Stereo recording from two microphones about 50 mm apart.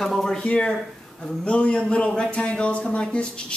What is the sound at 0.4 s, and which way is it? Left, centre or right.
A man's voice, left.